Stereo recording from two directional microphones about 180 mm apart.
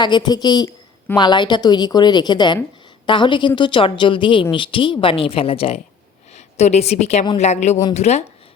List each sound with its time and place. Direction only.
0.0 s a woman's voice: 25° left (ahead or behind)